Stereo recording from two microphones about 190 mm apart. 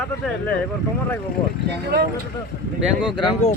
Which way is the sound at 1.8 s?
55° right (ahead or behind).